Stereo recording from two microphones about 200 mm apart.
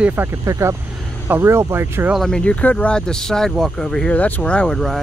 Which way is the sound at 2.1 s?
5° left (ahead or behind).